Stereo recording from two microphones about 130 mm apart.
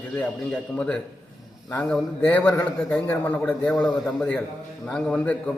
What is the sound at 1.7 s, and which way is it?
A man's voice, 10° left (ahead or behind).